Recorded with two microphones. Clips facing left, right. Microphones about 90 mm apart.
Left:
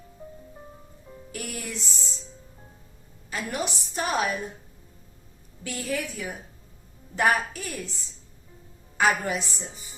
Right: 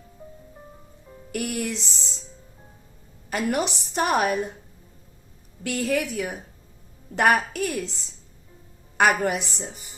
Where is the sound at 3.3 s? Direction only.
70° right (ahead or behind).